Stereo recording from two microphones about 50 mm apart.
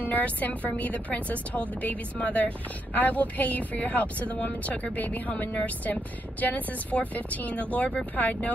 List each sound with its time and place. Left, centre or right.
0.0 s a woman's voice: left
6.4 s speech: left